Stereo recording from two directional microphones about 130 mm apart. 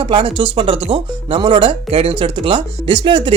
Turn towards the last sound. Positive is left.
turn(degrees=-40)  # may be behind; listen again after turning